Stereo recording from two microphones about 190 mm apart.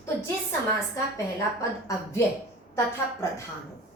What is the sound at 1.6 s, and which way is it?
Speech, 15° left (ahead or behind).